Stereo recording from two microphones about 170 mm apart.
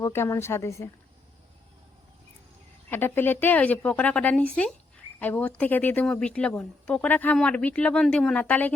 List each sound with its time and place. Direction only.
0.0 s speech: 15° left (ahead or behind)
2.9 s speech: 10° left (ahead or behind)